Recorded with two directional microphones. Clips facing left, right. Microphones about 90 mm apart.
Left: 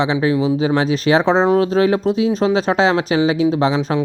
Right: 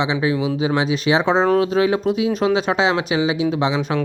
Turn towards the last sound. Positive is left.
turn(degrees=35)  # may be behind; listen again after turning